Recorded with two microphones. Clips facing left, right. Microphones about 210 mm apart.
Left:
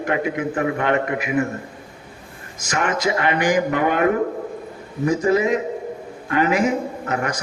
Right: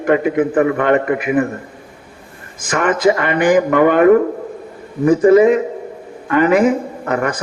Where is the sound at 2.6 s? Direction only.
55° right (ahead or behind).